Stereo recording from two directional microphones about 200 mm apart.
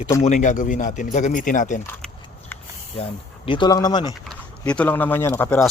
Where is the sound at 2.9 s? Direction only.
25° left (ahead or behind).